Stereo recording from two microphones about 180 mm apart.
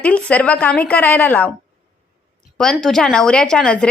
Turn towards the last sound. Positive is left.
turn(degrees=5)  # may be behind; listen again after turning